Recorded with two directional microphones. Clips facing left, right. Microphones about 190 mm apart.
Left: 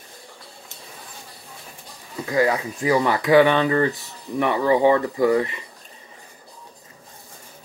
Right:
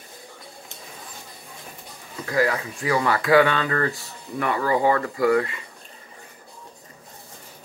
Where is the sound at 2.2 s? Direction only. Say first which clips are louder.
Left 2 dB; 20° left (ahead or behind).